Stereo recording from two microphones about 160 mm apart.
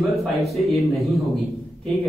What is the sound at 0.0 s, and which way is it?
A man's voice, centre (ahead or behind).